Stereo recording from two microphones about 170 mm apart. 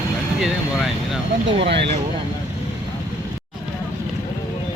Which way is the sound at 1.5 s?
90° right.